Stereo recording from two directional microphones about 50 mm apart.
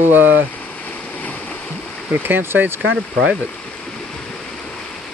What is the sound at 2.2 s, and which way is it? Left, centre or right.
Speech, right.